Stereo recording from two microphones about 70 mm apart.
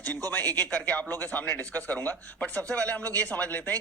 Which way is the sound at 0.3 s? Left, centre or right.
Left.